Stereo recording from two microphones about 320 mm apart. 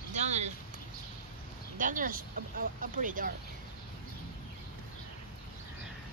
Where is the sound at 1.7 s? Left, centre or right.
Right.